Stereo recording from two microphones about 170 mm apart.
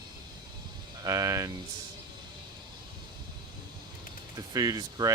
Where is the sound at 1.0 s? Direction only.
20° right (ahead or behind).